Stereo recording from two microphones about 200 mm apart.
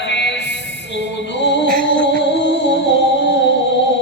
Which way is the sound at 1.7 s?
45° right (ahead or behind).